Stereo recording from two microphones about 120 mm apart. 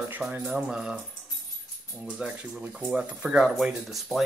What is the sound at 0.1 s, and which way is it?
Speech, 15° right (ahead or behind).